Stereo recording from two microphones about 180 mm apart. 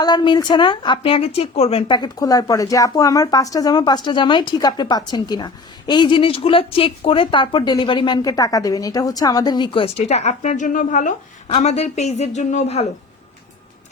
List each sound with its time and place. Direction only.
0.0 s speech: 25° left (ahead or behind)